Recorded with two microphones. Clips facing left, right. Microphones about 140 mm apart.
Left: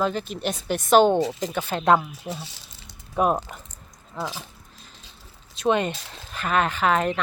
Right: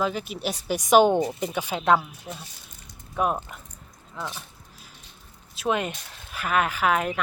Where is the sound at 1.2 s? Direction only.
90° left.